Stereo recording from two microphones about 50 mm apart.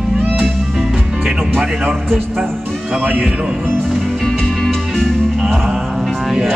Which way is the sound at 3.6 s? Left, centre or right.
Centre.